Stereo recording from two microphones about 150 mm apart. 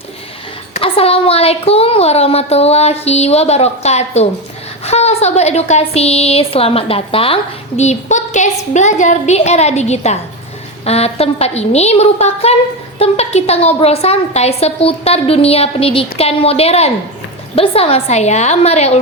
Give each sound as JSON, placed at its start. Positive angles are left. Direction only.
{"t": 0.7, "sound": "a woman's voice", "side_deg": 40}
{"t": 7.8, "sound": "a woman's voice", "side_deg": 50}